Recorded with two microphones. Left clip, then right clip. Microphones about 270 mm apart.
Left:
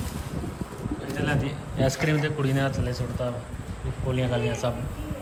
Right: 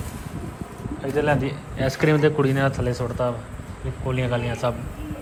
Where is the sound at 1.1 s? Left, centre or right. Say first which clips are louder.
Right 8 dB; centre.